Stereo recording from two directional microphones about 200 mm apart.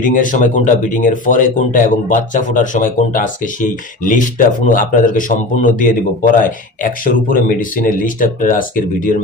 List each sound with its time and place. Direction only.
0.0 s speech: 40° left (ahead or behind)